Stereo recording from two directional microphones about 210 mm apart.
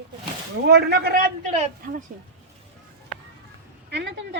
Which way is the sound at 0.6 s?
50° right (ahead or behind).